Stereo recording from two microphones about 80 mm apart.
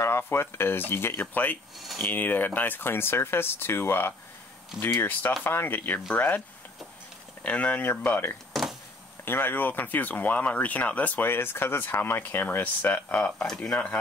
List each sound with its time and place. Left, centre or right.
0.0 s speech: left
7.4 s speech: centre